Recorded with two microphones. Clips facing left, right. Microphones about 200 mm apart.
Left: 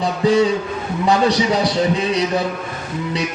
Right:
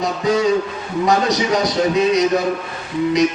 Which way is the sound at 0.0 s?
30° left (ahead or behind).